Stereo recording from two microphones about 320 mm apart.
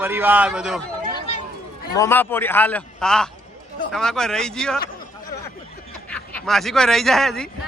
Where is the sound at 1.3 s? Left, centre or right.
Centre.